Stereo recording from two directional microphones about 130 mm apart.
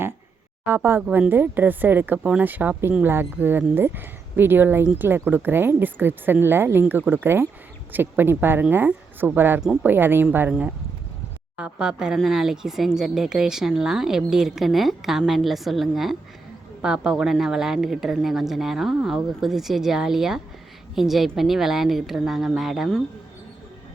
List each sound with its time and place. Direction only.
0.6 s speech: 15° right (ahead or behind)
9.6 s speech: 5° right (ahead or behind)
9.9 s speech: 15° right (ahead or behind); by 23.0 s centre (ahead or behind)